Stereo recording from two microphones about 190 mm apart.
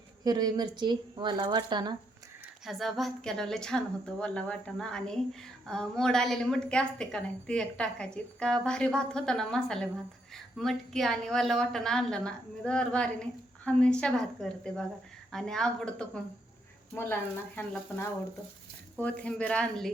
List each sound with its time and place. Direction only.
0.3 s speech: 20° right (ahead or behind)
2.6 s a woman's voice: centre (ahead or behind)
19.0 s speech: 5° left (ahead or behind)